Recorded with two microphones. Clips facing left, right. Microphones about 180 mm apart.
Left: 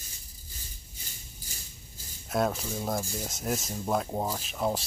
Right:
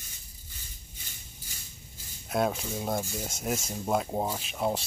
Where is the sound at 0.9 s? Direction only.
35° left (ahead or behind).